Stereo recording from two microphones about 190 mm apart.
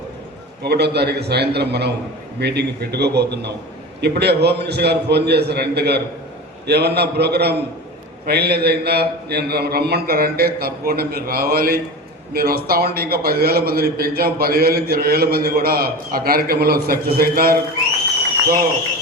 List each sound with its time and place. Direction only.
0.6 s a man's voice: 60° right (ahead or behind)